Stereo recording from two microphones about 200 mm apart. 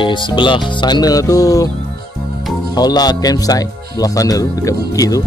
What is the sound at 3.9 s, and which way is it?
Music, 20° left (ahead or behind).